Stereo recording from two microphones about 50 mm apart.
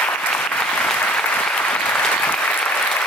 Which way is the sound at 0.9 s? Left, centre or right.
Left.